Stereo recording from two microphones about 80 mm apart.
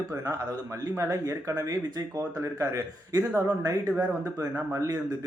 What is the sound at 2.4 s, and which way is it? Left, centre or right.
A man's voice, right.